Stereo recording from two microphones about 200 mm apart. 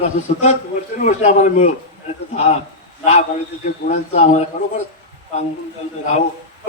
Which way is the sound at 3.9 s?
35° left (ahead or behind).